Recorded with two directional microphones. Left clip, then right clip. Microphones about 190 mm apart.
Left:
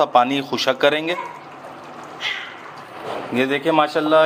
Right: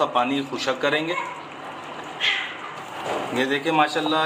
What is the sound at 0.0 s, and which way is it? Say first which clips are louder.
A man's voice: left 6 dB; 55° left (ahead or behind).